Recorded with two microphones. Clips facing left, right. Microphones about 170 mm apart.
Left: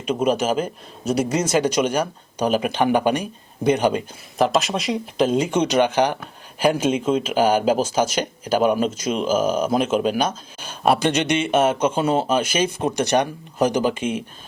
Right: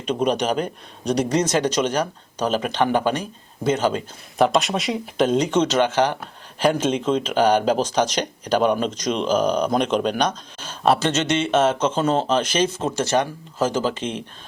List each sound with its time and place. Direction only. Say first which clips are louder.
0.0 s speech: left 1 dB; 5° left (ahead or behind)
4.4 s speech: right 1 dB; centre (ahead or behind)